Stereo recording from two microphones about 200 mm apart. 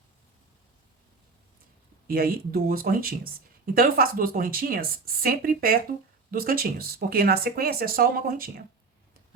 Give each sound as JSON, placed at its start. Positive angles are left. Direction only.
{"t": 2.0, "sound": "speech", "side_deg": -50}